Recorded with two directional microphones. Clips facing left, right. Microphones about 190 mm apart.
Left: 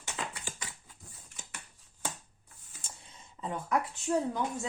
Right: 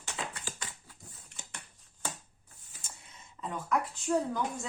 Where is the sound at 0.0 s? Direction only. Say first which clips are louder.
Even; 15° left (ahead or behind).